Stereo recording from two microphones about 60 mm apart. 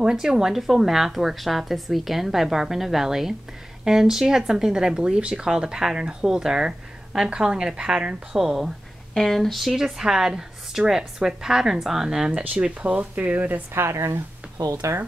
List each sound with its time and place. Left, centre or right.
0.0 s a woman's voice: centre
8.4 s a woman's voice: centre
9.1 s speech: centre; by 13.6 s right
14.6 s speech: right